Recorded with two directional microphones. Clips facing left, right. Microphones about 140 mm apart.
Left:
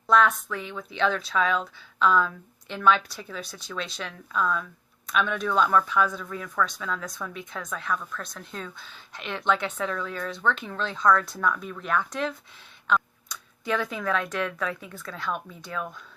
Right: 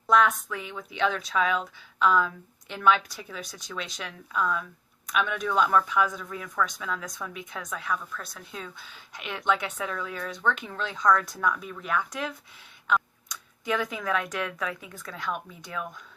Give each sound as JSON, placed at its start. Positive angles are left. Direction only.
{"t": 0.1, "sound": "speech", "side_deg": -15}